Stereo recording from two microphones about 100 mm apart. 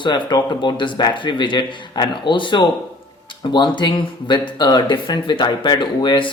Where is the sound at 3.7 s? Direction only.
50° left (ahead or behind).